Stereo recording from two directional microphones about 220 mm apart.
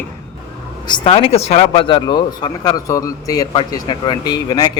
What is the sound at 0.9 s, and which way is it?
Speech, 20° left (ahead or behind).